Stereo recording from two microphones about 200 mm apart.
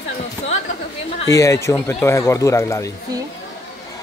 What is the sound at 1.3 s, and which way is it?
Speech, 15° left (ahead or behind).